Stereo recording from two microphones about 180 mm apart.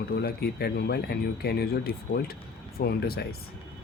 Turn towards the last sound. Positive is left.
turn(degrees=60)  # may be behind; listen again after turning